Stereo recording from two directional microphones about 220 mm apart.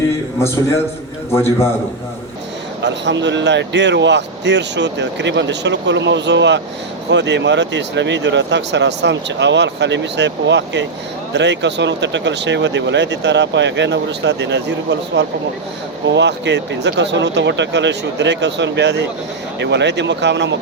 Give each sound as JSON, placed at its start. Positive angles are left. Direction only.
{"t": 0.3, "sound": "a man's voice", "side_deg": 10}
{"t": 2.8, "sound": "speech", "side_deg": -55}